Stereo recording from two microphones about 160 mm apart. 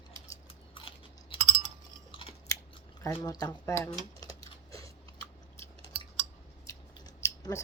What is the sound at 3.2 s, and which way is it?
Speech, 25° left (ahead or behind).